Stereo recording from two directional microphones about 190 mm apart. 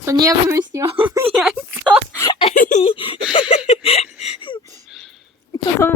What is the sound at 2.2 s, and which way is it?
Speech, 25° left (ahead or behind).